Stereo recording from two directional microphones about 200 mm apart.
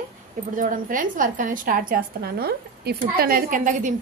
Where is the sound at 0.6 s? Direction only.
40° right (ahead or behind).